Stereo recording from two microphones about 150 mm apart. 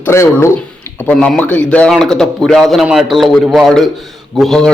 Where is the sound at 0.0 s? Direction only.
15° left (ahead or behind).